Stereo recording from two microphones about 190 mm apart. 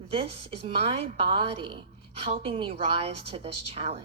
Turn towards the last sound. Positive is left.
turn(degrees=-30)  # may be behind; listen again after turning